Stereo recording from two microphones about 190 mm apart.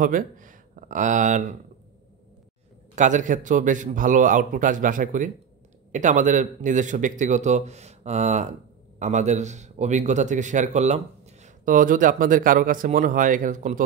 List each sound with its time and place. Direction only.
0.0 s speech: 45° right (ahead or behind)
3.0 s a man's voice: 40° right (ahead or behind)